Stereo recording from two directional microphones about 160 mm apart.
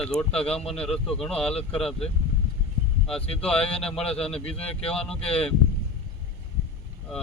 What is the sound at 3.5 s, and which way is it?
Speech, 35° left (ahead or behind).